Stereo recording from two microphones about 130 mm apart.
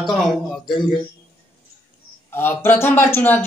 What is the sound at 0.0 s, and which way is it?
Speech, centre (ahead or behind).